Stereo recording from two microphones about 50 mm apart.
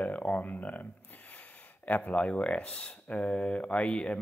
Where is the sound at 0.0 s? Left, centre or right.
Left.